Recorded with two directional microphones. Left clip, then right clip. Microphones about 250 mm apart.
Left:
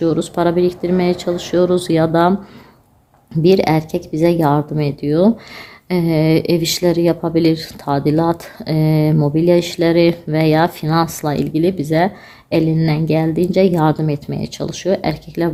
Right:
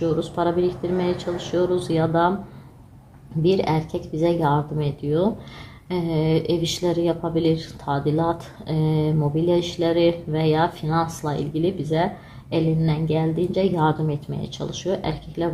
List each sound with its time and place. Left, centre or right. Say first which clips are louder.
0.0 s speech: left 6 dB; left
3.4 s speech: left 8 dB; left